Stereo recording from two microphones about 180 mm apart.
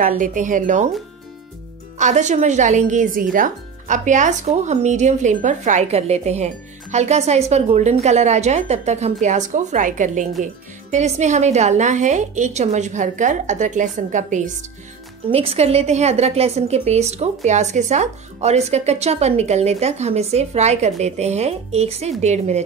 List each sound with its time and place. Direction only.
0.0 s speech: 45° right (ahead or behind)
2.0 s speech: 40° right (ahead or behind)